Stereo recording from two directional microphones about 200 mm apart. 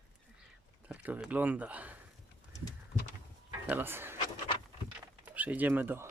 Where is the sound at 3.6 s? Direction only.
10° right (ahead or behind).